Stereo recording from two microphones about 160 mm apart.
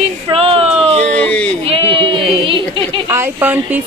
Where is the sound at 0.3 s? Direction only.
35° right (ahead or behind).